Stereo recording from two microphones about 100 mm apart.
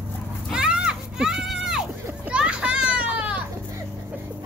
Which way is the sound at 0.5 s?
5° right (ahead or behind).